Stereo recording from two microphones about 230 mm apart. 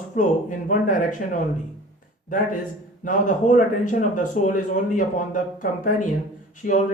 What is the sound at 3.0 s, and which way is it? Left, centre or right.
Speech, left.